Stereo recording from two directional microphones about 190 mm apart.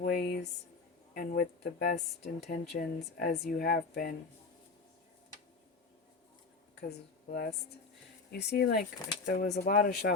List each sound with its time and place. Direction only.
0.0 s a sound: 55° left (ahead or behind)
1.1 s speech: 50° left (ahead or behind)
6.7 s speech: 60° left (ahead or behind)